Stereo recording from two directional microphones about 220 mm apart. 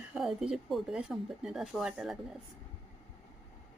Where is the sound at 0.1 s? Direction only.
Centre (ahead or behind).